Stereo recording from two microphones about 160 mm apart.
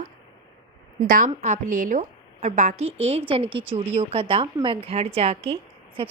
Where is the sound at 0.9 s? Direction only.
55° right (ahead or behind).